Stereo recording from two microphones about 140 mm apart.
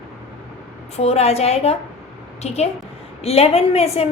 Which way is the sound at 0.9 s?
50° left (ahead or behind).